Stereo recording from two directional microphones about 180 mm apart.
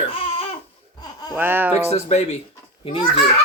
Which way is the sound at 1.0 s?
20° left (ahead or behind).